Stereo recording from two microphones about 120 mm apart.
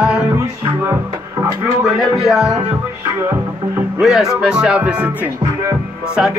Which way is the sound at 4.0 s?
5° right (ahead or behind).